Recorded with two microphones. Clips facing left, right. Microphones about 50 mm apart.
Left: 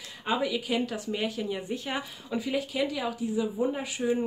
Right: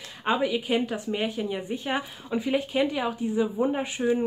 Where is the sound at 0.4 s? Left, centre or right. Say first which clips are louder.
Right 3 dB; right.